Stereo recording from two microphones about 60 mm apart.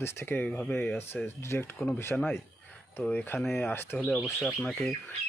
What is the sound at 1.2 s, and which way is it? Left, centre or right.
Speech, left.